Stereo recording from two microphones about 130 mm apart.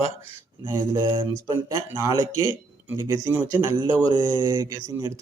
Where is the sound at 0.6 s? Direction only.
20° right (ahead or behind).